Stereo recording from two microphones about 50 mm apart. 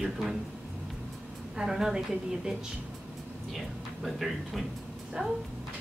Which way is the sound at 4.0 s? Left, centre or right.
Centre.